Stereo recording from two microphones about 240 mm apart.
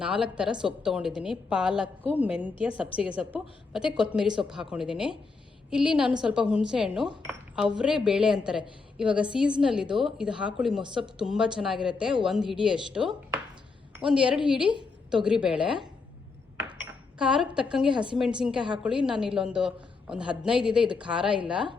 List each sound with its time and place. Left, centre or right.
0.0 s a woman's voice: centre
7.3 s chink: centre
7.8 s a woman's voice: centre
17.2 s a woman's voice: centre
17.9 s a woman's voice: centre
18.2 s a woman's voice: centre